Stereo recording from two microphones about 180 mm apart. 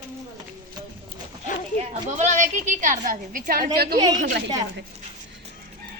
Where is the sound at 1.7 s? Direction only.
40° right (ahead or behind); by 4.0 s 55° right (ahead or behind).